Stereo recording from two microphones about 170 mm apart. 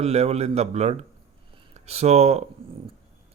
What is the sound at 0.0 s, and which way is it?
Speech, 35° right (ahead or behind).